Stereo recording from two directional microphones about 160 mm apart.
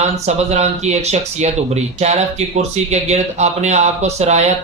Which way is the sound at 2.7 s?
45° right (ahead or behind).